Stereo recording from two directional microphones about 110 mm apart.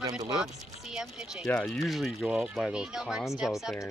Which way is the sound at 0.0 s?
35° right (ahead or behind).